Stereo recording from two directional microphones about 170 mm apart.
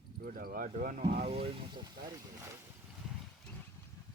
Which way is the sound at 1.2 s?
35° right (ahead or behind).